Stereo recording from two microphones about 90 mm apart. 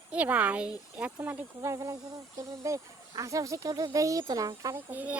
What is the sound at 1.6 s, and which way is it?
Speech, 35° right (ahead or behind).